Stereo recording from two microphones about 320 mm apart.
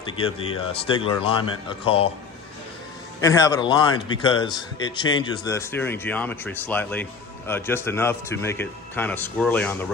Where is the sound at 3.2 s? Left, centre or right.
Centre.